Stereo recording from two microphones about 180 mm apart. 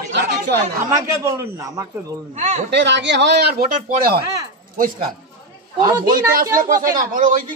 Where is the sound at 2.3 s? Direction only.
40° right (ahead or behind).